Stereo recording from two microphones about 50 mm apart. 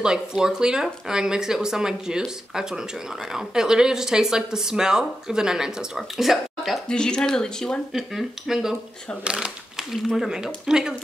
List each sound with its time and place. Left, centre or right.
0.0 s speech: centre
6.9 s speech: centre
7.9 s speech: centre
9.2 s speech: centre
9.8 s speech: centre